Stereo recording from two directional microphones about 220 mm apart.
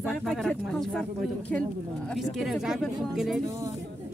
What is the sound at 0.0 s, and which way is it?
Speech, centre (ahead or behind).